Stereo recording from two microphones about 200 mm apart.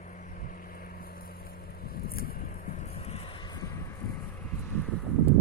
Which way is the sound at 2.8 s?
30° left (ahead or behind).